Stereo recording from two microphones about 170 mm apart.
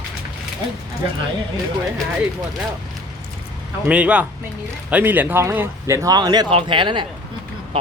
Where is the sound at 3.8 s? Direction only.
5° right (ahead or behind); by 7.1 s 30° right (ahead or behind).